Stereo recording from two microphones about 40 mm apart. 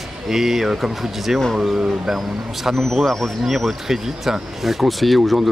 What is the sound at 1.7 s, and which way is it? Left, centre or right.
Speech, right.